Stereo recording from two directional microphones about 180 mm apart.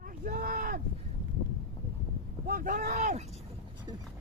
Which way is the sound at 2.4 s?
50° right (ahead or behind).